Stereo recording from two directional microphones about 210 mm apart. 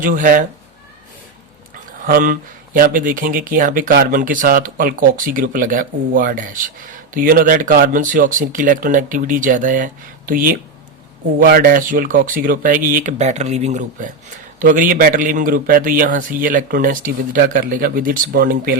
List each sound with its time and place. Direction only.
0.0 s speech: 40° right (ahead or behind)
1.9 s speech: 40° right (ahead or behind)